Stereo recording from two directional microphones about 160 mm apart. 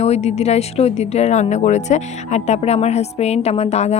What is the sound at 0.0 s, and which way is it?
Speech, 45° left (ahead or behind).